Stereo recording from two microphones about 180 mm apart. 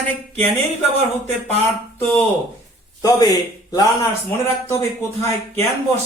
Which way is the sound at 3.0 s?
20° left (ahead or behind).